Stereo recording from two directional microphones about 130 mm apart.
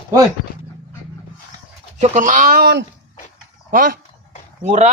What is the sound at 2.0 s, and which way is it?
Speech, 80° right.